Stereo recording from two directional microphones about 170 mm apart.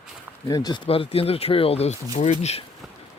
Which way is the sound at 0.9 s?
35° left (ahead or behind).